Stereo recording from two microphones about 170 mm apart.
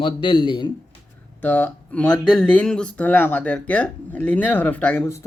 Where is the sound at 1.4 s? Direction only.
10° left (ahead or behind).